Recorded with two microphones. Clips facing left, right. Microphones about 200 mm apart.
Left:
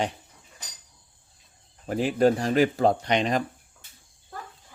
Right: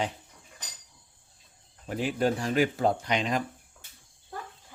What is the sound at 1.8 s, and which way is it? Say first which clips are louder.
Speech: left 6 dB; 40° left (ahead or behind).